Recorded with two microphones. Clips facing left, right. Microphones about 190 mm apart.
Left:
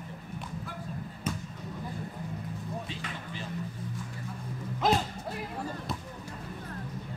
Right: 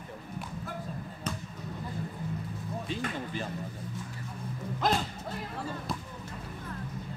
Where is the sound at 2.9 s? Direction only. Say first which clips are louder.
Right 6 dB; 50° right (ahead or behind).